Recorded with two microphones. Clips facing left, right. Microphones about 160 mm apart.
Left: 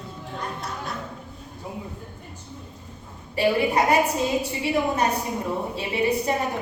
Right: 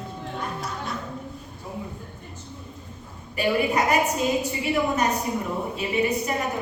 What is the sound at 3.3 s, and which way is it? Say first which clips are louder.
Speech: left 2 dB; 30° left (ahead or behind).